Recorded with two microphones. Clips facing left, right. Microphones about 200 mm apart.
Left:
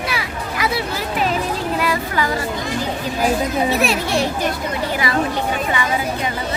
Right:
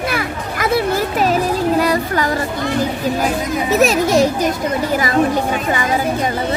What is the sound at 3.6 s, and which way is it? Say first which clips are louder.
Speech: right 5 dB; 40° right (ahead or behind).